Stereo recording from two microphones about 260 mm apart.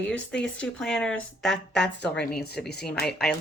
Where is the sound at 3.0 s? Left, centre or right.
Centre.